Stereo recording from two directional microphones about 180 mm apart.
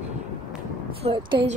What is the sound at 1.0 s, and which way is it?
Speech, 30° right (ahead or behind).